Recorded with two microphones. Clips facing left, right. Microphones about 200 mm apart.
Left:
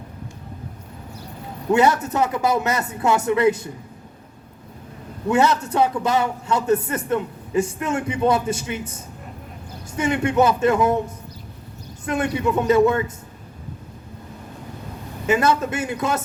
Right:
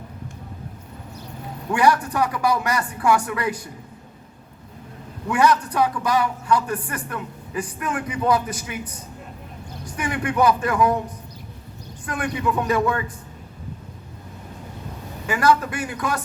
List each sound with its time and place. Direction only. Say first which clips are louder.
1.7 s a man's voice: left 2 dB; 25° left (ahead or behind)
5.3 s a man's voice: left 1 dB; 25° left (ahead or behind)
12.0 s a man's voice: left 3 dB; 25° left (ahead or behind)
15.3 s a man's voice: left 1 dB; 25° left (ahead or behind)